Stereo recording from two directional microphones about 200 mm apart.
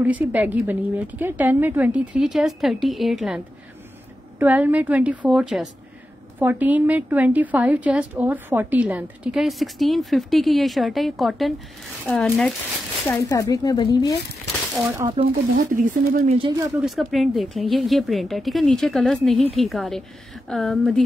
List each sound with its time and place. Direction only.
0.0 s a woman's voice: 10° right (ahead or behind)
13.2 s speech: 15° left (ahead or behind)
14.8 s a woman's voice: 15° right (ahead or behind)
15.5 s speech: 40° right (ahead or behind)
16.3 s speech: 20° right (ahead or behind)
16.8 s speech: centre (ahead or behind)